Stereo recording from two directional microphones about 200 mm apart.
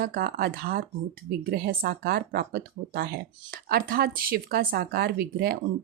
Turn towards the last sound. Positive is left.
turn(degrees=-50)  # may be behind; listen again after turning